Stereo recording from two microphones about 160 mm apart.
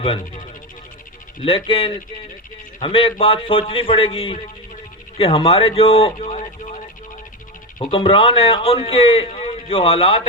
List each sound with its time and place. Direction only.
1.5 s a man's voice: 35° left (ahead or behind)
7.9 s a man's voice: 35° left (ahead or behind)